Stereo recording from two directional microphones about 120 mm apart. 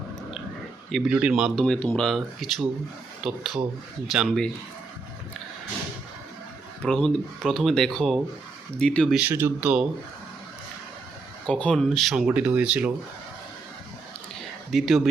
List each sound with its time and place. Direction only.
0.9 s speech: centre (ahead or behind)
1.6 s speech: 10° left (ahead or behind)
6.8 s speech: 5° left (ahead or behind)
9.1 s speech: 15° right (ahead or behind)
11.4 s speech: 5° left (ahead or behind); by 12.9 s 10° right (ahead or behind)
14.7 s speech: centre (ahead or behind)